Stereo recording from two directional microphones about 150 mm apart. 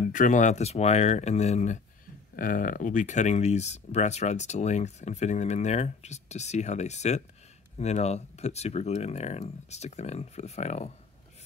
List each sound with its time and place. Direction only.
0.1 s speech: 60° left (ahead or behind)
2.3 s speech: 65° left (ahead or behind); by 10.9 s 50° left (ahead or behind)